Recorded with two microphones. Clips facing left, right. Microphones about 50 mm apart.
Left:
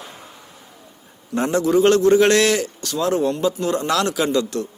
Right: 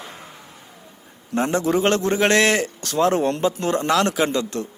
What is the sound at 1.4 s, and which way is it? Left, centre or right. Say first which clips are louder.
A man's voice: left 3 dB; right.